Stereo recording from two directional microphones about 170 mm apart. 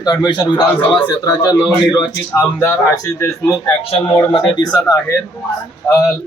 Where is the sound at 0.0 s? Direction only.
25° left (ahead or behind).